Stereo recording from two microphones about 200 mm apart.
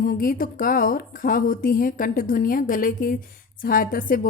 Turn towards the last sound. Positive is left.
turn(degrees=45)  # may be behind; listen again after turning